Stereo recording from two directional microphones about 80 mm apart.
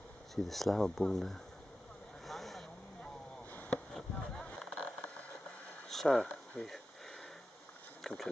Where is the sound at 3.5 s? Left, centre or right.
Centre.